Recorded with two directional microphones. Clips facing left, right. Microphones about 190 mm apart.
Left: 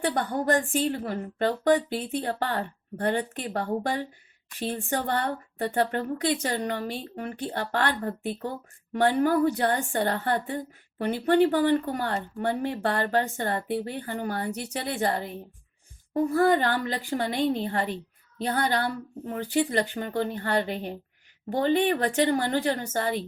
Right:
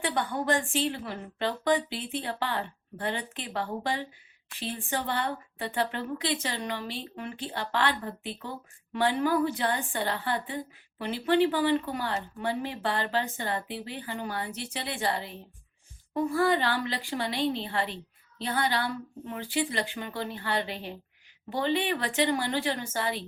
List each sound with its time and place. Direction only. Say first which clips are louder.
0.0 s a woman's voice: left 3 dB; 40° left (ahead or behind)